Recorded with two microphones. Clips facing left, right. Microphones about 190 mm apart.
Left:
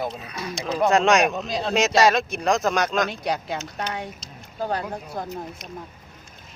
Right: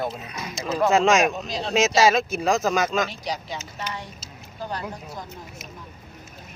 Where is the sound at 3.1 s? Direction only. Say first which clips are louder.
Left 4 dB; 55° left (ahead or behind).